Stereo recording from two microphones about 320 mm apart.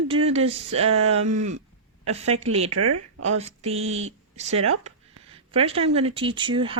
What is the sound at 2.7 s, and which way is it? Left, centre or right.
Speech, right.